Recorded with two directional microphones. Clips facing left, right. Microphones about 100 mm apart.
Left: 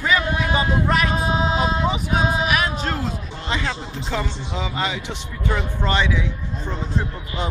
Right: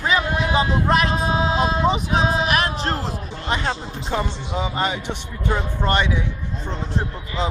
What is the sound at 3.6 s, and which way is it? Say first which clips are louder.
Speech: right 2 dB; 25° right (ahead or behind).